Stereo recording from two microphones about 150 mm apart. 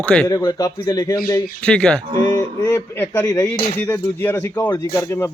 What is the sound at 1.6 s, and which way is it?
Speech, 5° left (ahead or behind).